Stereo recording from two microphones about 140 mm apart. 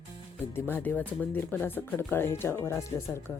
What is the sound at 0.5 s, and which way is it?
Speech, 15° left (ahead or behind).